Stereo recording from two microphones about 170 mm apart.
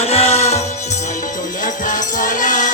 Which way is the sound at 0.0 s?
35° left (ahead or behind).